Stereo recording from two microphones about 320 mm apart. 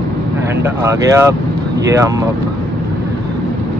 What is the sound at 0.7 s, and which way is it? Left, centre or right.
Speech, centre.